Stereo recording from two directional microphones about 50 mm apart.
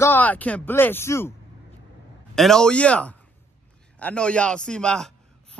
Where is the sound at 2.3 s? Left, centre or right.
Centre.